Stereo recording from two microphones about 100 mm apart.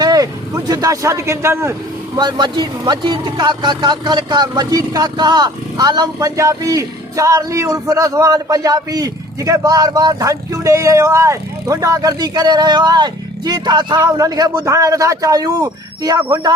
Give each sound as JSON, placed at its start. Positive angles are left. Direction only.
{"t": 0.0, "sound": "speech", "side_deg": -40}
{"t": 2.1, "sound": "speech", "side_deg": -45}